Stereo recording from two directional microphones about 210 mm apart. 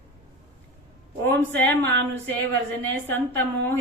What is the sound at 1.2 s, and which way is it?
Speech, 10° left (ahead or behind).